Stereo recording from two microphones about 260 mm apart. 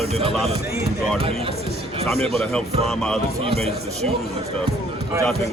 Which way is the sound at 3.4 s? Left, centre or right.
Right.